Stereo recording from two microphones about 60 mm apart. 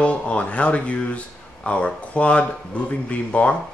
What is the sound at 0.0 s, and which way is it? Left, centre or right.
Speech, left.